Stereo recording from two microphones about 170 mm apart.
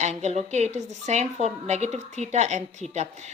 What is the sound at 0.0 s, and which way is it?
A woman's voice, 40° right (ahead or behind).